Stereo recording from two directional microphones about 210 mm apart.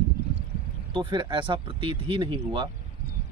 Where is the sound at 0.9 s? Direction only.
25° right (ahead or behind).